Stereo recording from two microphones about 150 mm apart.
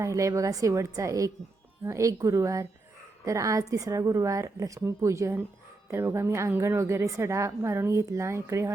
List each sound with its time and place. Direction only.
0.0 s a woman's voice: 20° right (ahead or behind)